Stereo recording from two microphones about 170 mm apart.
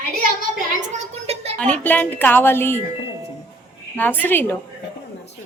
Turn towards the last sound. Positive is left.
turn(degrees=10)  # may be behind; listen again after turning